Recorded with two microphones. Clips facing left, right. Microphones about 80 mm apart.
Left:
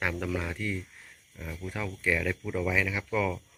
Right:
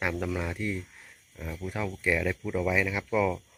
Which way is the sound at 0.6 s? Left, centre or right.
Right.